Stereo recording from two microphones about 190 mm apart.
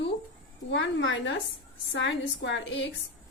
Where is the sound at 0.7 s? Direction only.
70° left (ahead or behind).